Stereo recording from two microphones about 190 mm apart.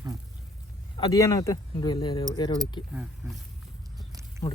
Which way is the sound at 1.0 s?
20° left (ahead or behind).